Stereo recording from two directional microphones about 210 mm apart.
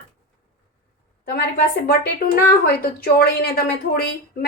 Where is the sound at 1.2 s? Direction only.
50° left (ahead or behind).